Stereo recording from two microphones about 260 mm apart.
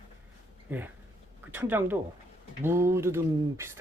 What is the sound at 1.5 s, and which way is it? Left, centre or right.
Speech, centre.